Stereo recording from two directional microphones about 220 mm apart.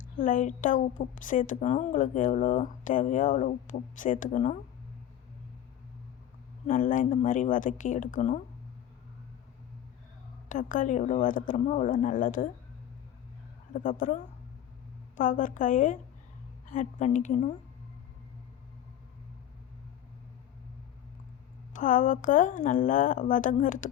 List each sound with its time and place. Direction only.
0.2 s a woman's voice: 35° left (ahead or behind)
6.7 s a woman's voice: 35° left (ahead or behind)
10.5 s a woman's voice: 35° left (ahead or behind)
13.7 s a woman's voice: 35° left (ahead or behind)
21.7 s a woman's voice: 35° left (ahead or behind)